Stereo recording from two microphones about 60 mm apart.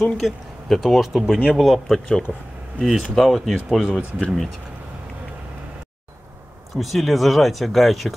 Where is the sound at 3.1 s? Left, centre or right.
Centre.